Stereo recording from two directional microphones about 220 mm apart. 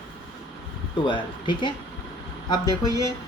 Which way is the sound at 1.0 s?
20° left (ahead or behind).